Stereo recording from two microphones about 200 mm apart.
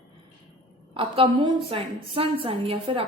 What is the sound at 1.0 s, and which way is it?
A woman's voice, 25° right (ahead or behind).